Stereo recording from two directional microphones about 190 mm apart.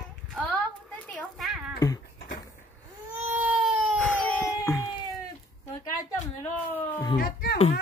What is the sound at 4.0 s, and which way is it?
Baby cry, 5° left (ahead or behind).